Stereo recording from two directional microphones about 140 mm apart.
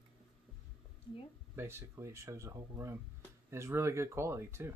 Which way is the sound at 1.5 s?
15° right (ahead or behind).